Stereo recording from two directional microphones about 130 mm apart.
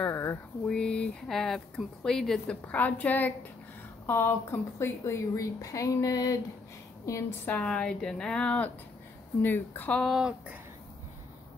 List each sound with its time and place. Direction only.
0.1 s a sound: 20° left (ahead or behind)
0.7 s speech: 5° left (ahead or behind)
10.0 s speech: 5° right (ahead or behind)